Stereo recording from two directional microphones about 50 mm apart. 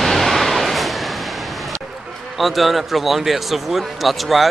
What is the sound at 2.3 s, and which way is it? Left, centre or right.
A man's voice, centre.